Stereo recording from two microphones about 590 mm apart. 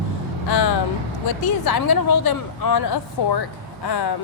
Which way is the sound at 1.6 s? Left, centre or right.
Left.